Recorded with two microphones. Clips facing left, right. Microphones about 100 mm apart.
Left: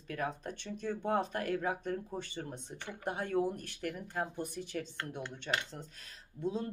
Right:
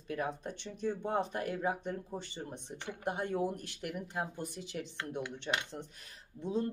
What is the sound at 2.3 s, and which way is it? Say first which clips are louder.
Speech: left 1 dB; 20° right (ahead or behind).